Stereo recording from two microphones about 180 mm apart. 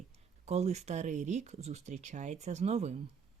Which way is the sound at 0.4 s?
35° right (ahead or behind).